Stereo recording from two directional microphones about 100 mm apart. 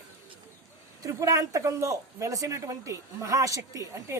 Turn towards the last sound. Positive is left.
turn(degrees=-35)  # may be behind; listen again after turning